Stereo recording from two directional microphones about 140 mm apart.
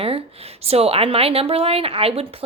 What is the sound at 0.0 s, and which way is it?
A woman's voice, 45° right (ahead or behind).